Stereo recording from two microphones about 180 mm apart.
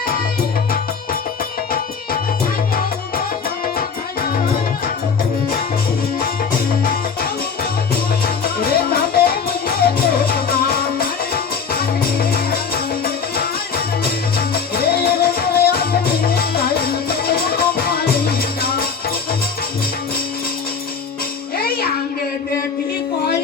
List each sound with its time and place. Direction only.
8.6 s music: 55° left (ahead or behind)
14.3 s music: 60° left (ahead or behind)
21.6 s music: 60° left (ahead or behind)